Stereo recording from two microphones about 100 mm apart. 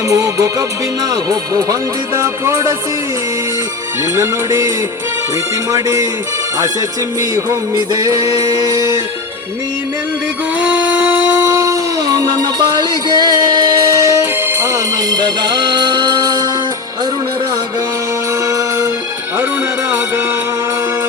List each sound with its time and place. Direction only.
0.1 s music: 30° right (ahead or behind)
4.1 s music: 30° right (ahead or behind)
5.7 s music: 30° right (ahead or behind)
7.3 s music: 35° right (ahead or behind)
10.6 s a sound: 15° right (ahead or behind)
11.3 s a sound: 35° right (ahead or behind)
15.1 s music: 45° right (ahead or behind)
18.4 s music: 35° right (ahead or behind)